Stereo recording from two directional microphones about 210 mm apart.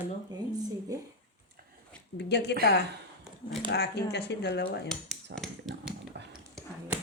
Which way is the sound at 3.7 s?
50° left (ahead or behind).